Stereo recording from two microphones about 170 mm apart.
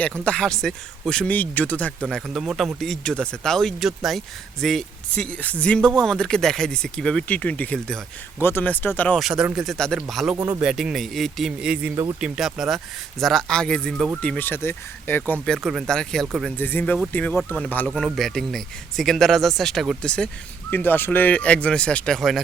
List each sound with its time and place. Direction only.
0.3 s speech: 5° left (ahead or behind)
9.2 s speech: 5° right (ahead or behind)
16.6 s speech: 10° left (ahead or behind)